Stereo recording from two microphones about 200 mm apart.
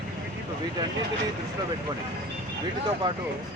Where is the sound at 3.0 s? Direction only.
20° right (ahead or behind).